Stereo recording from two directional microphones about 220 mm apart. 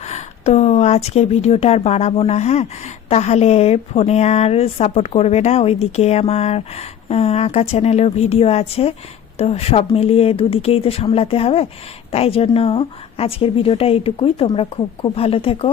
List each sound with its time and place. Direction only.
0.0 s speech: 30° left (ahead or behind)